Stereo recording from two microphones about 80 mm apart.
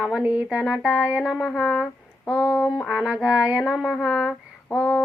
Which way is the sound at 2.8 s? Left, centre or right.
Centre.